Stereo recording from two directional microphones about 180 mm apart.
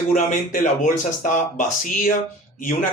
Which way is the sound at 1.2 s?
45° left (ahead or behind).